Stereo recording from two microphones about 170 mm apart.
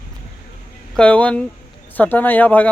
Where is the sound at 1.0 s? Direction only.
5° left (ahead or behind).